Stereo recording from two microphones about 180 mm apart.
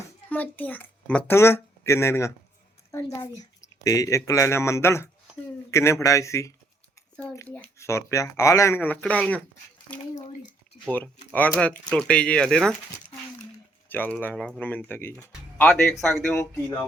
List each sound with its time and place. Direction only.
0.3 s a child's voice: 10° left (ahead or behind)
10.8 s speech: 10° left (ahead or behind)
13.8 s speech: 10° left (ahead or behind)
16.3 s speech: 15° left (ahead or behind)